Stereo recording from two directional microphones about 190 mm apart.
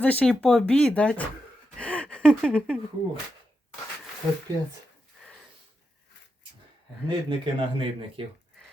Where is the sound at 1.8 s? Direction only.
5° left (ahead or behind).